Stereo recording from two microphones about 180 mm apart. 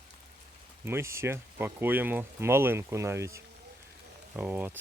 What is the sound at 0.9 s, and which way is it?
Speech, 15° right (ahead or behind).